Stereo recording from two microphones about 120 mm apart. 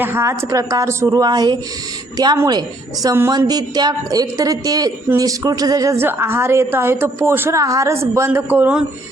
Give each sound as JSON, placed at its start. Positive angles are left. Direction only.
{"t": 0.0, "sound": "a woman's voice", "side_deg": -20}